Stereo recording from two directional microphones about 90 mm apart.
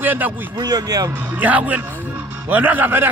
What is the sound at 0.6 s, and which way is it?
Speech, 45° right (ahead or behind).